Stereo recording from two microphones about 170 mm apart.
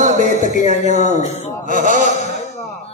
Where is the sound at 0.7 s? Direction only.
45° left (ahead or behind).